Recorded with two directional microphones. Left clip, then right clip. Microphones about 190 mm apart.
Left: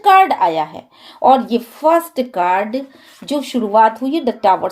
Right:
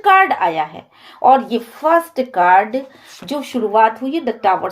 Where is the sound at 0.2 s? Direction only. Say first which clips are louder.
Left 2 dB; 45° left (ahead or behind).